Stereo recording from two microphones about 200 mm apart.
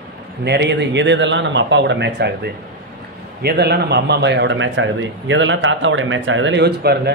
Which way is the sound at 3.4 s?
55° right (ahead or behind).